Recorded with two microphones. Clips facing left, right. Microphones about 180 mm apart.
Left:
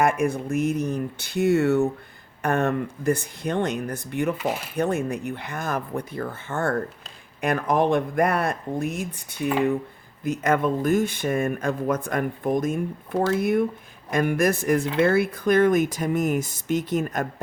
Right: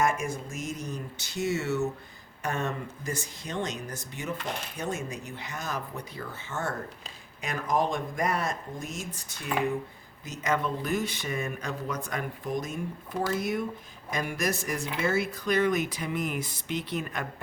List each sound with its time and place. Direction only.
0.0 s speech: 60° left (ahead or behind)
4.4 s speech: 5° left (ahead or behind)
4.8 s speech: 60° left (ahead or behind)